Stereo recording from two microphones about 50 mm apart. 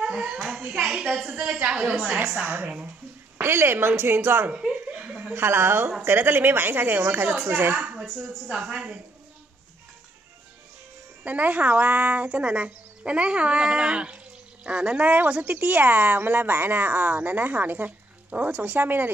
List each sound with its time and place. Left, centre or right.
0.0 s a woman's voice: centre
2.4 s a woman's voice: right
3.3 s a woman's voice: right
4.5 s chuckle: centre
5.3 s a woman's voice: right
7.8 s a woman's voice: right
11.2 s speech: right